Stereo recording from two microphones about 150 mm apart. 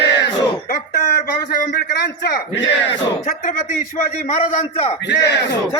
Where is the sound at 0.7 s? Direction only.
80° left.